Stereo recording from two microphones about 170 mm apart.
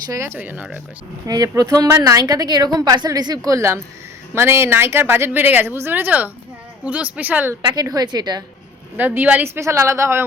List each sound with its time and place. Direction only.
0.1 s a woman's voice: 15° right (ahead or behind)
1.3 s a woman's voice: 20° right (ahead or behind)
7.6 s a woman's voice: 25° right (ahead or behind)
9.0 s a woman's voice: 10° right (ahead or behind)